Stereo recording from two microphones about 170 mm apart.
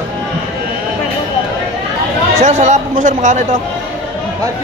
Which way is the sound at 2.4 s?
45° right (ahead or behind).